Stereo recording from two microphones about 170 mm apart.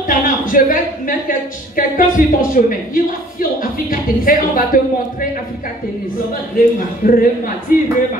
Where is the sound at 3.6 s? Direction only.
55° left (ahead or behind).